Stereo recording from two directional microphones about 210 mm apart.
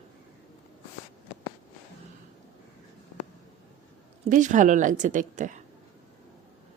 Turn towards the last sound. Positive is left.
turn(degrees=-35)  # may be behind; listen again after turning